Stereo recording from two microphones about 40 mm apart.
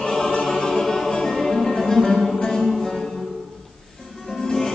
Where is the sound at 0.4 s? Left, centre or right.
Centre.